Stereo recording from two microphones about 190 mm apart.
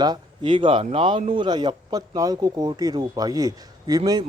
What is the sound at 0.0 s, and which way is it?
A man's voice, 25° right (ahead or behind).